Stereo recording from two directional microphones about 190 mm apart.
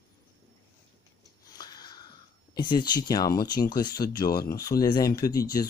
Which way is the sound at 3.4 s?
20° left (ahead or behind).